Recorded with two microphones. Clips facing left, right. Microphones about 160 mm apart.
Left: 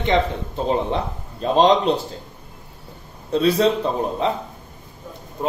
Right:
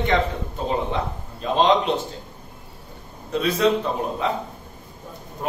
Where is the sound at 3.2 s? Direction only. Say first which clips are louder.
Left 3 dB; 30° left (ahead or behind).